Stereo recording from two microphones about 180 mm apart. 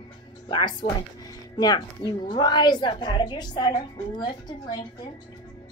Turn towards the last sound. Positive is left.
turn(degrees=25)  # may be behind; listen again after turning